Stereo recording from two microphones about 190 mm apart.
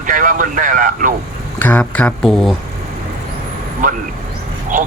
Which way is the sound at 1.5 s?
10° left (ahead or behind).